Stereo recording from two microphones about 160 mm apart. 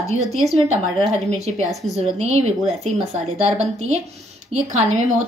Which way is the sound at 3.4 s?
45° right (ahead or behind).